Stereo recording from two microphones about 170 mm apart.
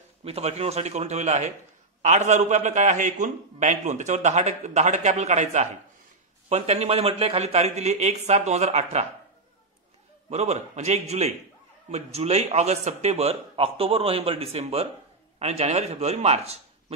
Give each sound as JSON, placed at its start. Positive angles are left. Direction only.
{"t": 0.2, "sound": "a man's voice", "side_deg": -35}
{"t": 10.3, "sound": "a man's voice", "side_deg": -40}